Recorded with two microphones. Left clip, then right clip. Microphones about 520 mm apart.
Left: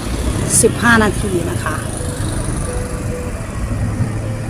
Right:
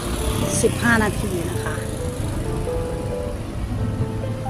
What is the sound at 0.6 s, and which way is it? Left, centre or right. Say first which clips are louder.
Speech: left 7 dB; right.